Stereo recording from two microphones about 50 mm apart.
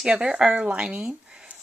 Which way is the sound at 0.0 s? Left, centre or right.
Centre.